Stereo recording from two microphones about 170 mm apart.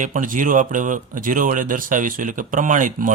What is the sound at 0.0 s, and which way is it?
Speech, 50° right (ahead or behind).